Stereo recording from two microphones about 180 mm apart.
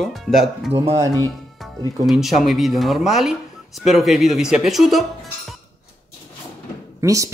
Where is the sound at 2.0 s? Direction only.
Centre (ahead or behind).